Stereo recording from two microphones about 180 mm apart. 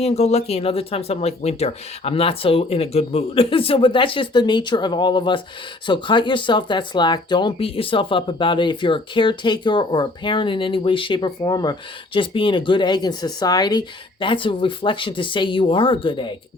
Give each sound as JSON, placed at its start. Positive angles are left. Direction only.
{"t": 0.0, "sound": "speech", "side_deg": 35}